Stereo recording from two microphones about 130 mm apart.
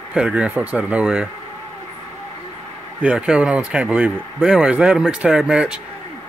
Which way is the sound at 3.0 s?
10° right (ahead or behind).